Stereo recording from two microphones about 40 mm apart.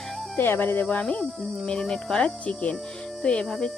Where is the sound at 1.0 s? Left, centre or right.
Left.